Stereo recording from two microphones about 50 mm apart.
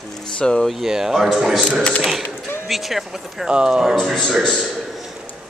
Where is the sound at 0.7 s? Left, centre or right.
Centre.